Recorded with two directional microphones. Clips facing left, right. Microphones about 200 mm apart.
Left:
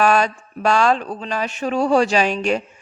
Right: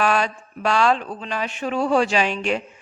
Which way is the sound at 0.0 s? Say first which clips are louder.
Left 4 dB; 45° left (ahead or behind).